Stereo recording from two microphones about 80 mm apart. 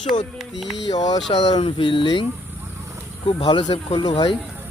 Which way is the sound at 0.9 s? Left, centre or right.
Left.